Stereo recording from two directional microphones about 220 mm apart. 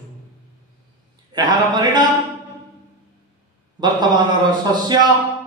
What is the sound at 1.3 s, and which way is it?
Speech, 20° right (ahead or behind).